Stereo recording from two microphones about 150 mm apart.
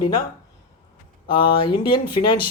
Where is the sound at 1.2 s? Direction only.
35° left (ahead or behind).